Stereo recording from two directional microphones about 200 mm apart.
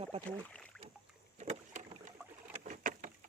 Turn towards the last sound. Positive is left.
turn(degrees=-40)  # may be behind; listen again after turning